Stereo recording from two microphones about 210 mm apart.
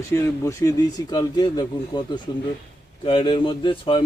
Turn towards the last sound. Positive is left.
turn(degrees=25)  # may be behind; listen again after turning